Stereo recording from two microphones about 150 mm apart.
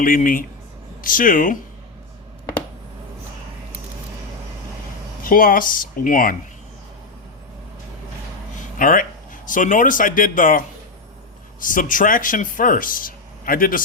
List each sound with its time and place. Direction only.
0.0 s speech: 65° left (ahead or behind)
5.2 s speech: 70° left (ahead or behind)
8.8 s speech: 65° left (ahead or behind)
11.6 s speech: 60° left (ahead or behind)